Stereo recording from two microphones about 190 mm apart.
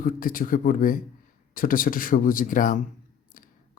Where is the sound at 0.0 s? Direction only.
45° left (ahead or behind).